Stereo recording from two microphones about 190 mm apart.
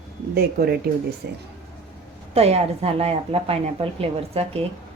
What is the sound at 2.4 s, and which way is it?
A woman's voice, 35° right (ahead or behind).